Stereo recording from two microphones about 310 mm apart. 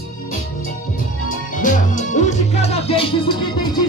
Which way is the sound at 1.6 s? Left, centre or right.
Left.